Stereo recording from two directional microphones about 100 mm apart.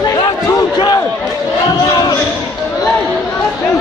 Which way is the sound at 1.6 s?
40° left (ahead or behind).